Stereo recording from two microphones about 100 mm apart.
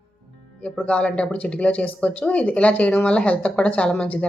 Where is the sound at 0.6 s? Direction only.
10° left (ahead or behind).